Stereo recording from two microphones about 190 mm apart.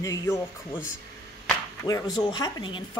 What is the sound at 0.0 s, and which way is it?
Speech, 15° left (ahead or behind).